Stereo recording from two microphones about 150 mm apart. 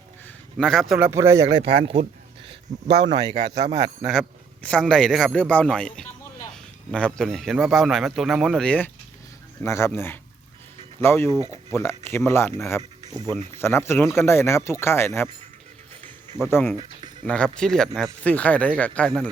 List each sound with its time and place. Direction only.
0.5 s a man's voice: centre (ahead or behind)
0.9 s speech: 15° right (ahead or behind)
1.6 s speech: 40° right (ahead or behind)
4.0 s a man's voice: 5° left (ahead or behind)
16.7 s a sound: 30° right (ahead or behind)
17.2 s speech: 5° left (ahead or behind)